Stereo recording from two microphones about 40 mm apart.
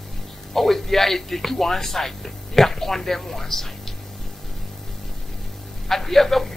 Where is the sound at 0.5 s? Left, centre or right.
Centre.